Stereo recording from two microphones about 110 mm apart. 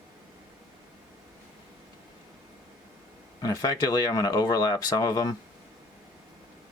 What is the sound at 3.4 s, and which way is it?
Speech, 35° left (ahead or behind).